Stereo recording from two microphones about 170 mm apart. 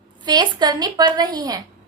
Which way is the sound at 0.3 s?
25° right (ahead or behind).